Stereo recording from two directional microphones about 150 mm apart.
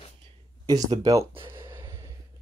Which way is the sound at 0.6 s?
25° right (ahead or behind).